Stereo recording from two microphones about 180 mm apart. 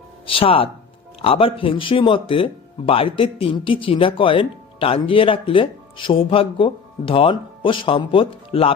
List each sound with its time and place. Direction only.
0.3 s speech: 30° left (ahead or behind)